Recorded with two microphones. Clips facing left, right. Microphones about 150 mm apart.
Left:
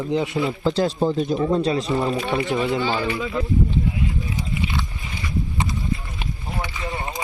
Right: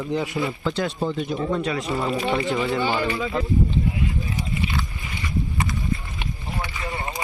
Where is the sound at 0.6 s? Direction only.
35° left (ahead or behind).